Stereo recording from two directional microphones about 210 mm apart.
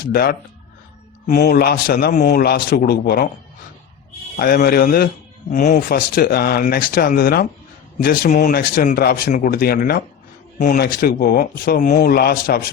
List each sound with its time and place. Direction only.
0.1 s speech: 45° left (ahead or behind)
4.4 s speech: 45° left (ahead or behind)